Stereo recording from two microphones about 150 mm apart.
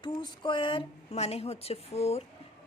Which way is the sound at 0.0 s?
30° left (ahead or behind).